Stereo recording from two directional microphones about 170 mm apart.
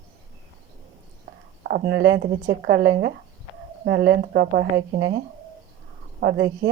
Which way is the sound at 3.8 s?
70° right (ahead or behind).